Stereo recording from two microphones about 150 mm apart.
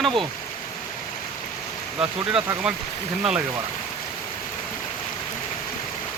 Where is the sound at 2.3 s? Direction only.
5° right (ahead or behind).